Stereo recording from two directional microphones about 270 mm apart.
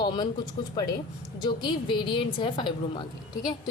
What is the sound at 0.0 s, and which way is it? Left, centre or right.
A woman's voice, centre.